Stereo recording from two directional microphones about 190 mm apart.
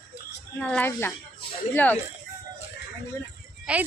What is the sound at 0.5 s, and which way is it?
Speech, 5° left (ahead or behind).